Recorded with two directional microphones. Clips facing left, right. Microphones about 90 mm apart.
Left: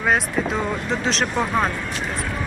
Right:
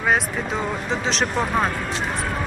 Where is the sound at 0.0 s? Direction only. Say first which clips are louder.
Left 1 dB; centre (ahead or behind).